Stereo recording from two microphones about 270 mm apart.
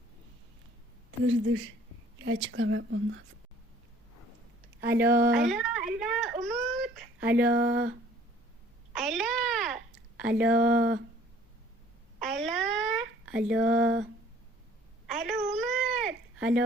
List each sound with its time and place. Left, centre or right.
1.3 s speech: right
2.1 s a sound: right
2.5 s speech: right
4.8 s speech: centre
5.0 s speech: right
5.5 s whimper: centre
7.5 s speech: right
8.9 s babbling: centre
12.2 s a sound: centre